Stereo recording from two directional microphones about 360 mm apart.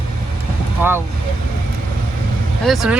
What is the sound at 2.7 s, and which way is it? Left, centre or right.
Speech, centre.